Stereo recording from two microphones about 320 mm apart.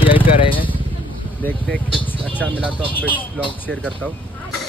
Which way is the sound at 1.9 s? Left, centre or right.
Centre.